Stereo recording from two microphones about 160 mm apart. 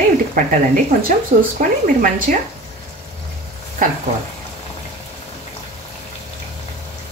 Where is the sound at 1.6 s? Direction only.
60° right (ahead or behind).